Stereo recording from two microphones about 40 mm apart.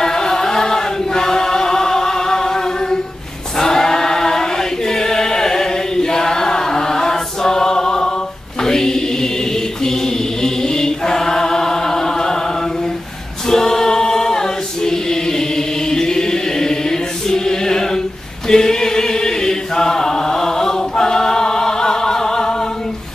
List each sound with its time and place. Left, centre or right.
0.0 s chant: centre
3.5 s choir: centre
8.6 s chant: centre
13.5 s choir: centre
18.5 s chant: centre